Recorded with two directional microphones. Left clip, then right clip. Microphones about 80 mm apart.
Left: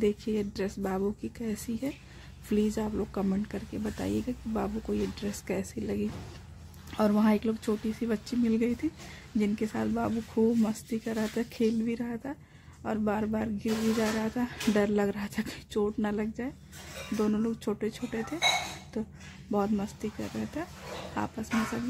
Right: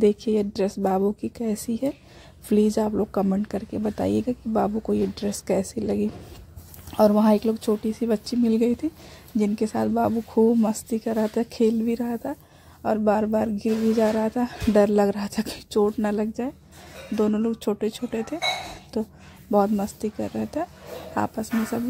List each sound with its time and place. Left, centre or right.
0.0 s speech: right
7.2 s speech: right
11.5 s speech: right
12.0 s speech: centre
12.8 s speech: right
14.0 s speech: centre
14.4 s speech: right